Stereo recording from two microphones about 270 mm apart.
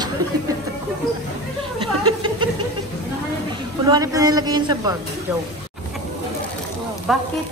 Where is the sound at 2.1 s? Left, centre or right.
Centre.